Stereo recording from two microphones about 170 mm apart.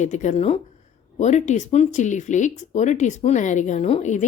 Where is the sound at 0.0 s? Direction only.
45° left (ahead or behind).